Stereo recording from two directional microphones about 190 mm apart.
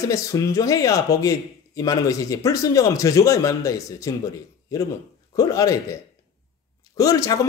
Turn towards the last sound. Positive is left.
turn(degrees=20)  # may be behind; listen again after turning